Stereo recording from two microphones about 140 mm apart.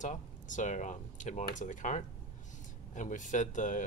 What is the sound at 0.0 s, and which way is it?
Speech, 60° left (ahead or behind).